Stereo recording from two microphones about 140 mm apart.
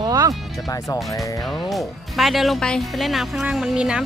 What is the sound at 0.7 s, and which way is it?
Speech, 25° left (ahead or behind).